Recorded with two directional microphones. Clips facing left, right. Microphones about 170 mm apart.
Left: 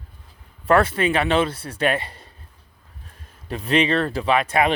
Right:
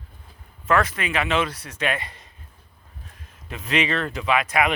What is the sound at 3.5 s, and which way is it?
Speech, 35° left (ahead or behind).